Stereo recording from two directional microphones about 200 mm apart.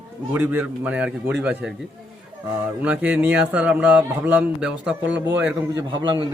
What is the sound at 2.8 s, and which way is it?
A man's voice, 5° right (ahead or behind).